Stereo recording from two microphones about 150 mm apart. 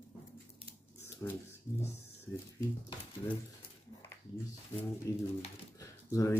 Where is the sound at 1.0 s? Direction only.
15° left (ahead or behind).